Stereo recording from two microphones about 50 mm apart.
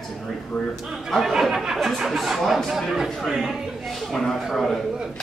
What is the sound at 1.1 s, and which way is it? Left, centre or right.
A man's voice, centre.